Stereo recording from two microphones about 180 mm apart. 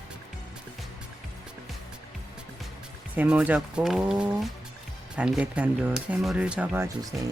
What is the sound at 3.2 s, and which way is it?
Speech, 10° right (ahead or behind).